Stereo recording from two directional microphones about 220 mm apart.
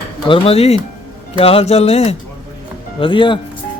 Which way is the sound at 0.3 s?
25° left (ahead or behind).